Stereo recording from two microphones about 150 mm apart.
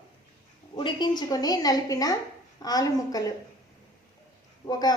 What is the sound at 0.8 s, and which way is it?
A woman's voice, 30° left (ahead or behind).